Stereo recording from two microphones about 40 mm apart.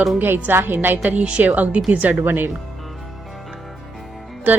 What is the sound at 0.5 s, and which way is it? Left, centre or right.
Speech, right.